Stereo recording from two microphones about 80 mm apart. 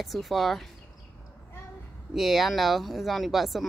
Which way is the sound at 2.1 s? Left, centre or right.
Centre.